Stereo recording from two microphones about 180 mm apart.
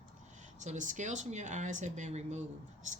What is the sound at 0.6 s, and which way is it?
Speech, 45° right (ahead or behind).